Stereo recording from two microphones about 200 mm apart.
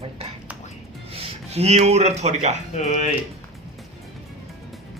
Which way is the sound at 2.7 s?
35° left (ahead or behind).